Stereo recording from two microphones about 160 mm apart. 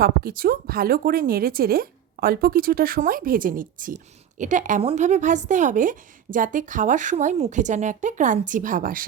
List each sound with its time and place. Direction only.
0.0 s a woman's voice: 70° right (ahead or behind)